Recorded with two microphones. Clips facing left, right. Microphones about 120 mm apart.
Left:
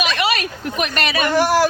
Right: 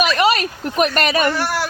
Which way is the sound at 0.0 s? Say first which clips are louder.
Right 4 dB; 40° right (ahead or behind).